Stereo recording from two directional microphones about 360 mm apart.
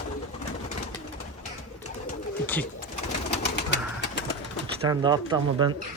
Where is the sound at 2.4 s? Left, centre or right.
Centre.